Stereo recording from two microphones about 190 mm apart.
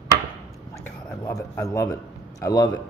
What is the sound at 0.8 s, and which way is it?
Speech, 15° left (ahead or behind).